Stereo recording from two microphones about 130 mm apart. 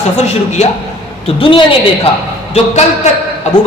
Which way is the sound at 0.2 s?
60° left (ahead or behind).